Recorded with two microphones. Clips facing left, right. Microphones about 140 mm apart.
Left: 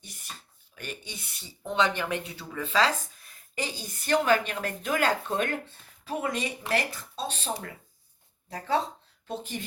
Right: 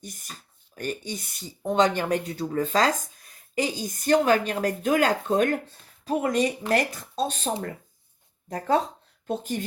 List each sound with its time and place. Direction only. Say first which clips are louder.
0.0 s speech: right 4 dB; 45° right (ahead or behind)